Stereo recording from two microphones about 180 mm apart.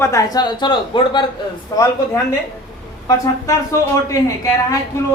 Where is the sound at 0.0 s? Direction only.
20° left (ahead or behind).